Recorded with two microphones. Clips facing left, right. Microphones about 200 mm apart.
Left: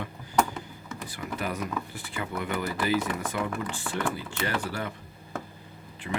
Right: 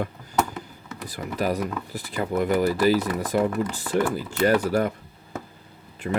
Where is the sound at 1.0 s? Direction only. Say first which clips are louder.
Right 7 dB; 40° right (ahead or behind).